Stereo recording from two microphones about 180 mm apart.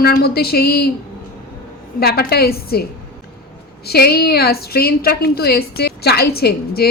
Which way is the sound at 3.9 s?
60° left (ahead or behind).